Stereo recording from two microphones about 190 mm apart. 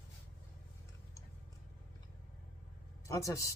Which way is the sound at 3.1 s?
15° left (ahead or behind).